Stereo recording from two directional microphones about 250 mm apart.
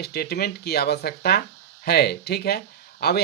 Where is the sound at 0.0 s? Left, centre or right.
Left.